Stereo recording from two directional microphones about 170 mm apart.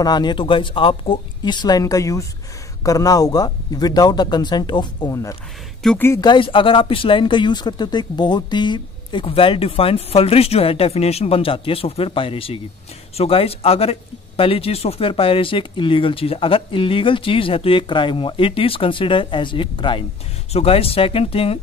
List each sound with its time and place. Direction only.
0.0 s speech: 25° left (ahead or behind)
5.8 s speech: 5° left (ahead or behind)
6.2 s speech: 30° left (ahead or behind)